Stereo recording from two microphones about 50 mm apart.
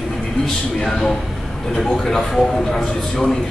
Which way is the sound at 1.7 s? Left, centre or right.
Centre.